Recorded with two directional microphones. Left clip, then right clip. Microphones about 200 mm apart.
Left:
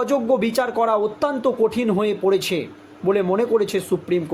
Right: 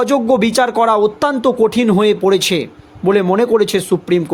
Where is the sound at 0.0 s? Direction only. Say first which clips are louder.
Right 6 dB; 50° right (ahead or behind).